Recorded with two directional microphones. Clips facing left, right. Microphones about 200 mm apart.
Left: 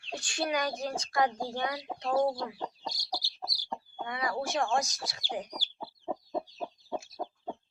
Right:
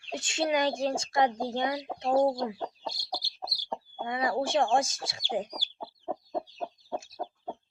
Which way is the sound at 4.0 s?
25° right (ahead or behind).